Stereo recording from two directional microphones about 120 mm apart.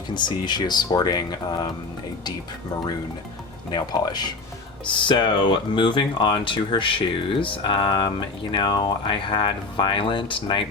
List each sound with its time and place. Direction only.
0.1 s speech: 40° left (ahead or behind)
3.7 s speech: 35° left (ahead or behind)